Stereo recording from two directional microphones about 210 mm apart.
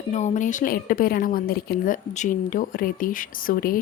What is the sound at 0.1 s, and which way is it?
A woman's voice, 35° left (ahead or behind).